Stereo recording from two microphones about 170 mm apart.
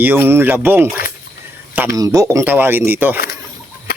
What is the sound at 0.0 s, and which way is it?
A man's voice, 10° right (ahead or behind).